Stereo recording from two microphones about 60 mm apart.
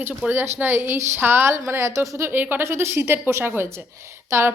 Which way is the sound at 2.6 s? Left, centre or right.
Right.